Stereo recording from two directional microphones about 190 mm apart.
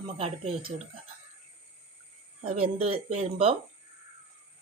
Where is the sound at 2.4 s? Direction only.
30° right (ahead or behind).